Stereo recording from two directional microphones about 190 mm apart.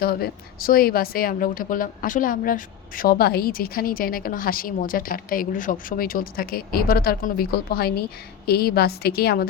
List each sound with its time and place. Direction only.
0.0 s a woman's voice: 55° left (ahead or behind)